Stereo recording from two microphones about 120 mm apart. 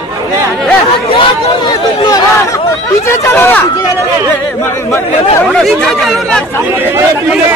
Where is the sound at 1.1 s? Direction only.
45° left (ahead or behind); by 3.6 s 20° left (ahead or behind).